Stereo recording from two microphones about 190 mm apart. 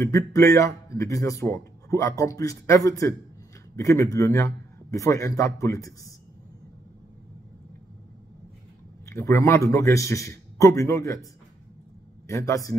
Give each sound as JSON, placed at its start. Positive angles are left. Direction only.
{"t": 0.0, "sound": "a man's voice", "side_deg": 15}
{"t": 9.0, "sound": "a man's voice", "side_deg": 15}
{"t": 12.3, "sound": "a man's voice", "side_deg": 15}